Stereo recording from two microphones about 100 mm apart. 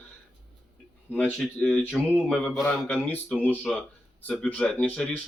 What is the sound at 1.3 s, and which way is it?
Speech, 5° left (ahead or behind).